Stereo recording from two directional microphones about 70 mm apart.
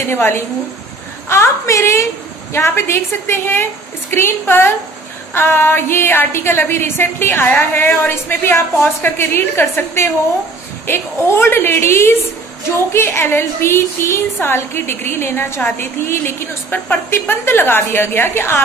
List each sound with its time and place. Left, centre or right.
0.1 s a woman's voice: left